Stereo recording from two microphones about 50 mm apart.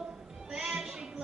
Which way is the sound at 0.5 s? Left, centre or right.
Centre.